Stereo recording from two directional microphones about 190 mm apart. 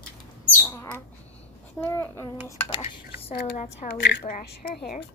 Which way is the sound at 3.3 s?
55° left (ahead or behind).